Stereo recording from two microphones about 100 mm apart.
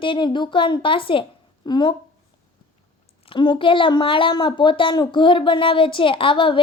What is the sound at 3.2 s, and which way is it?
Speech, 55° left (ahead or behind).